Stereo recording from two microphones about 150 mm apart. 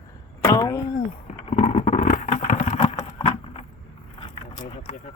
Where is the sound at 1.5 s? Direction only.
45° left (ahead or behind).